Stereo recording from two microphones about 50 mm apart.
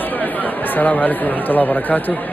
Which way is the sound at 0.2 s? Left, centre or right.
Left.